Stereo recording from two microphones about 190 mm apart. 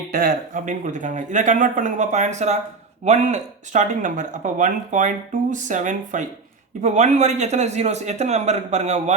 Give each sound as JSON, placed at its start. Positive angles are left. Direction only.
{"t": 0.1, "sound": "speech", "side_deg": -50}